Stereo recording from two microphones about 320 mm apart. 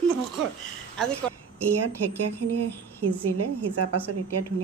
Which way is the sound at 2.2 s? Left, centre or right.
Right.